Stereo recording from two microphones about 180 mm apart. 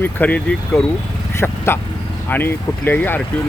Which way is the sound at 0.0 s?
10° left (ahead or behind).